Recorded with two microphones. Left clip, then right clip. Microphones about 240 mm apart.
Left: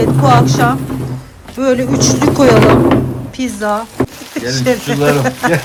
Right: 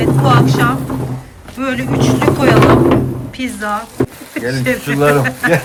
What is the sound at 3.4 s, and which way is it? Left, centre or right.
Speech, centre.